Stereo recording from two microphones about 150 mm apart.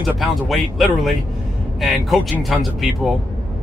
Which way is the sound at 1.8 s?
Centre (ahead or behind).